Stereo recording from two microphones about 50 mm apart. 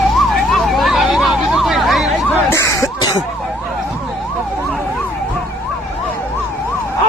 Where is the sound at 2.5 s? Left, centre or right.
Left.